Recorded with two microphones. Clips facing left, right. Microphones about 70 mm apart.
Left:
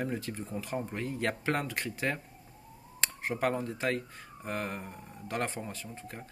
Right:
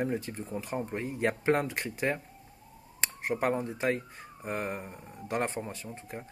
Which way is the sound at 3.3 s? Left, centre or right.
Right.